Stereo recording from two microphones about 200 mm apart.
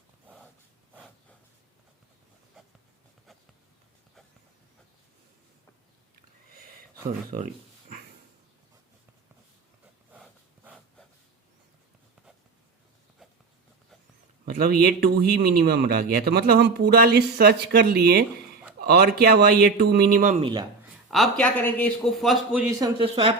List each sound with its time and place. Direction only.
0.9 s a sound: centre (ahead or behind)
2.6 s writing: centre (ahead or behind)
6.5 s a sound: 45° right (ahead or behind)
10.1 s dog: 10° right (ahead or behind)
14.4 s a man's voice: 50° right (ahead or behind)
20.4 s a woman's voice: 20° right (ahead or behind)
21.1 s a man's voice: centre (ahead or behind)
23.0 s a woman's voice: 30° right (ahead or behind)